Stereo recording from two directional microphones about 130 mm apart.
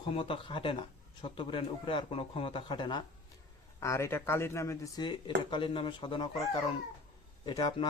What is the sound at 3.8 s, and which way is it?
Speech, 20° left (ahead or behind).